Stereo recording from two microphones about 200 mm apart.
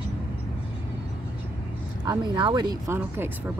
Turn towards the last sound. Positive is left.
turn(degrees=-10)  # may be behind; listen again after turning